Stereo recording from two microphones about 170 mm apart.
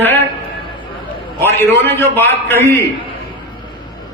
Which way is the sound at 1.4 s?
15° left (ahead or behind).